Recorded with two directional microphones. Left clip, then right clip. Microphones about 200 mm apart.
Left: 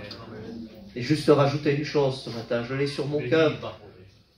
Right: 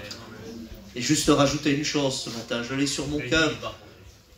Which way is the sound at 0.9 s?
20° right (ahead or behind).